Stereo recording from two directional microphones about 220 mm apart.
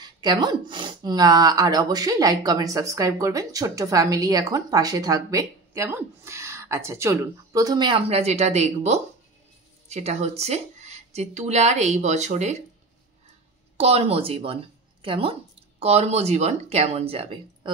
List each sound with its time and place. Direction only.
0.0 s speech: 20° right (ahead or behind)
13.7 s speech: 30° right (ahead or behind)